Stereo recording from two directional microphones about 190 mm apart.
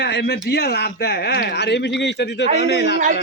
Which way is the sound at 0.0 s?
65° left (ahead or behind).